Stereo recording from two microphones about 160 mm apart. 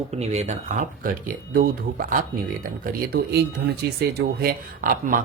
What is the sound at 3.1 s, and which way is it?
Speech, 90° right.